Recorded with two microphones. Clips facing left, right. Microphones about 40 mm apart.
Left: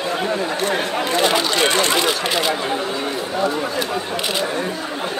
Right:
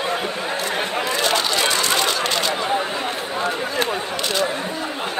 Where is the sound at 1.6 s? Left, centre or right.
Left.